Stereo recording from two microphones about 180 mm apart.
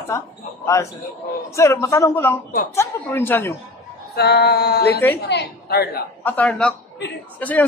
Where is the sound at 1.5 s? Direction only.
15° left (ahead or behind).